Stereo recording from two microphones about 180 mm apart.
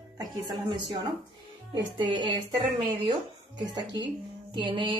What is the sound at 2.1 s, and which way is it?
Speech, 25° right (ahead or behind).